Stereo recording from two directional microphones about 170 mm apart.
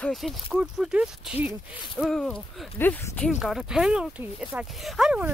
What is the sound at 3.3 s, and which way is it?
Speech, 5° right (ahead or behind).